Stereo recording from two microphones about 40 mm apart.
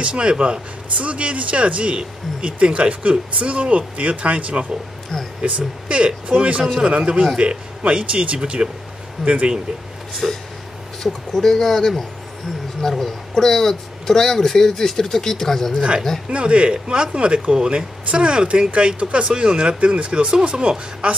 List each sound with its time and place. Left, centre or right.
0.0 s speech: right
10.2 s speech: centre
11.0 s speech: centre
16.3 s speech: right